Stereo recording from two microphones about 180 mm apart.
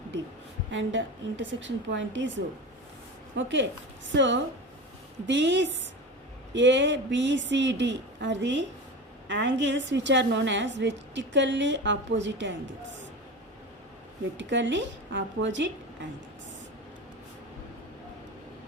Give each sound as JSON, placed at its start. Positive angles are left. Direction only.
{"t": 0.7, "sound": "a woman's voice", "side_deg": -90}
{"t": 14.3, "sound": "a woman's voice", "side_deg": -90}